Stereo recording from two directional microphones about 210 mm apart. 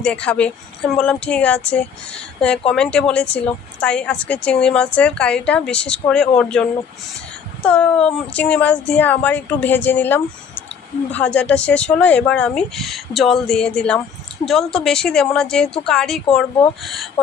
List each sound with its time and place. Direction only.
0.0 s speech: 5° left (ahead or behind)